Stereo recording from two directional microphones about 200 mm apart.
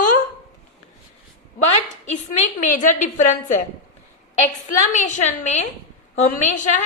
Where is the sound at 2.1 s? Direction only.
35° left (ahead or behind).